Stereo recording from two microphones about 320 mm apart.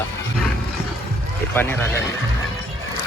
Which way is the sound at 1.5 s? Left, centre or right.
Centre.